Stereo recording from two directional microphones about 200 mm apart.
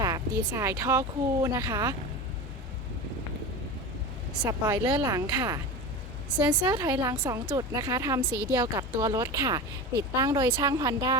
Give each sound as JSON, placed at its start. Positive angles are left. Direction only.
{"t": 0.0, "sound": "speech", "side_deg": -15}
{"t": 4.4, "sound": "speech", "side_deg": -20}
{"t": 6.3, "sound": "a woman's voice", "side_deg": -5}
{"t": 6.7, "sound": "speech", "side_deg": -20}